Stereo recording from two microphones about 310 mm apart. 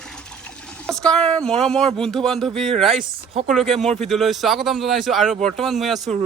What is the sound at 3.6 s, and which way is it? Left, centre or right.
Speech, centre.